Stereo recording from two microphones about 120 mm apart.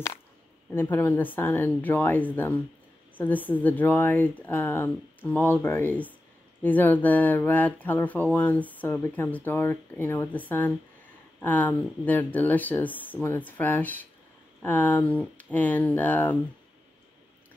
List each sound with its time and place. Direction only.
0.7 s speech: 20° left (ahead or behind)
11.4 s speech: 15° left (ahead or behind)